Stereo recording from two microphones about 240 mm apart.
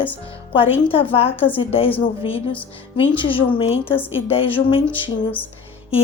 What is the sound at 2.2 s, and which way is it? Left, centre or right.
Speech, left.